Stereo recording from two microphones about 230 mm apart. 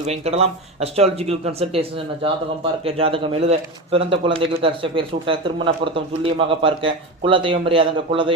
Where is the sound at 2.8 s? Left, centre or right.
Right.